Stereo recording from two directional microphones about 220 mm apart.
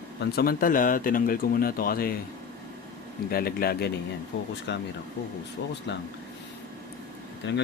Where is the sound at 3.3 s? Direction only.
45° left (ahead or behind).